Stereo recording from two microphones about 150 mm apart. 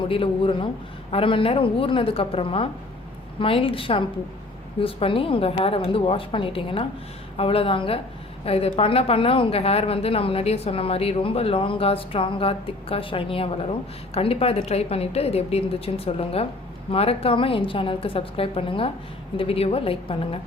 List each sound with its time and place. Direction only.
0.0 s a woman's voice: 35° left (ahead or behind)